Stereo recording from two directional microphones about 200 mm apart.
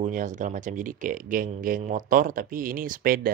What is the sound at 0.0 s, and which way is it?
Speech, 40° right (ahead or behind).